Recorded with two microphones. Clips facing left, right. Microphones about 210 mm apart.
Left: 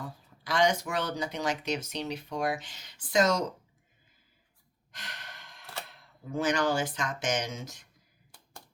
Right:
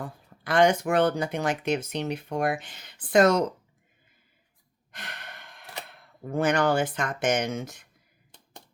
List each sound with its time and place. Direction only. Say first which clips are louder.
0.0 s speech: right 4 dB; 55° right (ahead or behind)
4.9 s sigh: right 4 dB; 55° right (ahead or behind)
5.9 s speech: right 5 dB; 60° right (ahead or behind)